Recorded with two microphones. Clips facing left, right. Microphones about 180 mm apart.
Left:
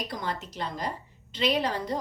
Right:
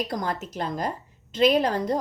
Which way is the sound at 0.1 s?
45° right (ahead or behind).